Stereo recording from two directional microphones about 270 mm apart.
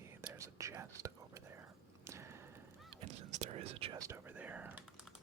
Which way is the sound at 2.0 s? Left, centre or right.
Centre.